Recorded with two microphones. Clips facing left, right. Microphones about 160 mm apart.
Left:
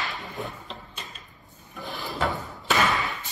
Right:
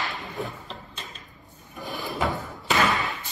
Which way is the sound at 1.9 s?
20° right (ahead or behind).